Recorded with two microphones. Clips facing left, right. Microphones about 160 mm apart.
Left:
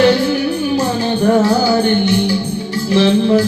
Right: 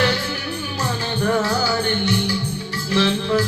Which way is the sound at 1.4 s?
20° left (ahead or behind).